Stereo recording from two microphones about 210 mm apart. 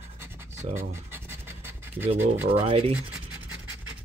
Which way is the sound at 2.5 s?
25° right (ahead or behind).